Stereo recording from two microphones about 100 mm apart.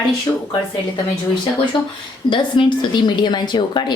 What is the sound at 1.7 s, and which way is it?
A woman's voice, 55° left (ahead or behind).